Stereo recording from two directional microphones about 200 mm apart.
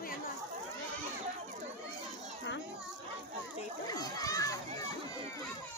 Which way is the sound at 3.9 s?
20° left (ahead or behind).